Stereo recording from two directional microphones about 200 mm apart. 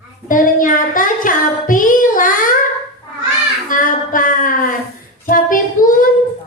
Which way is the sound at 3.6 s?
40° left (ahead or behind).